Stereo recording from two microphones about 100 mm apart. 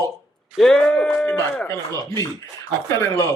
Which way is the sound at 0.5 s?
Centre (ahead or behind).